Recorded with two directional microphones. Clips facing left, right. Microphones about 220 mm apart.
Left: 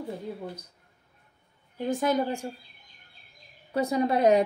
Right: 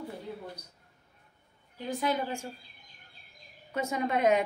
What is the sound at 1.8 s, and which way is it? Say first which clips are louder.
Speech: left 5 dB; 50° left (ahead or behind).